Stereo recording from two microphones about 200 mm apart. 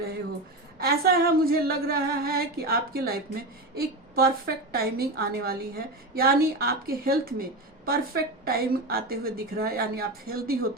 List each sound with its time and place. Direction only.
0.8 s a woman's voice: 50° right (ahead or behind)